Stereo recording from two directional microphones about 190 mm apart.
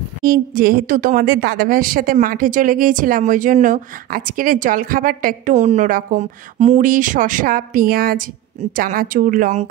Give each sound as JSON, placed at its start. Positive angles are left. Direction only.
{"t": 0.2, "sound": "a woman's voice", "side_deg": -50}